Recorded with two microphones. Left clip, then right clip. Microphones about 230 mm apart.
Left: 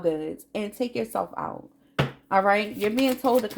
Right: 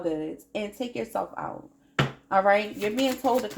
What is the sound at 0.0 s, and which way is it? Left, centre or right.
Speech, left.